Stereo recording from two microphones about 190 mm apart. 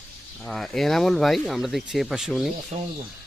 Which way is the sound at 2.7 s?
30° right (ahead or behind).